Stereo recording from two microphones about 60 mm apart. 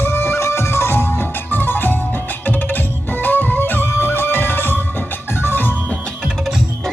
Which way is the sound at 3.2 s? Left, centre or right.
Left.